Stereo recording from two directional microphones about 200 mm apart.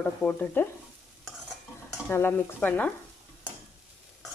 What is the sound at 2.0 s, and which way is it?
Stir, 10° left (ahead or behind).